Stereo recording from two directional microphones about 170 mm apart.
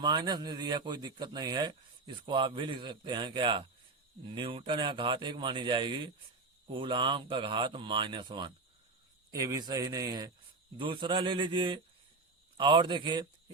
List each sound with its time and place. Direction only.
0.0 s speech: 25° right (ahead or behind)